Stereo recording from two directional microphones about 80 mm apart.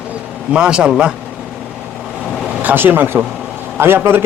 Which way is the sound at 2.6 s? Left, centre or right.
Right.